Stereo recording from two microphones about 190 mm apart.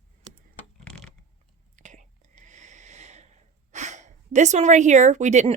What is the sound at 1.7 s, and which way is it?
Whispering, 40° right (ahead or behind).